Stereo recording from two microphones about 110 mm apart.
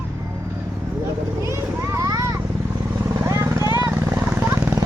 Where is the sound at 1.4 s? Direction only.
30° right (ahead or behind).